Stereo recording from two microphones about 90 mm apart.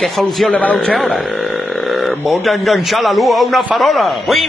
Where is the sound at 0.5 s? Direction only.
20° left (ahead or behind).